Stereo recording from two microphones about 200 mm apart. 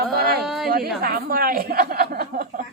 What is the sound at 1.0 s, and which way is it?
Speech, 50° right (ahead or behind).